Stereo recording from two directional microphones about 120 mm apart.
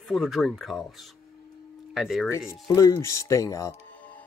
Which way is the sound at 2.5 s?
25° left (ahead or behind).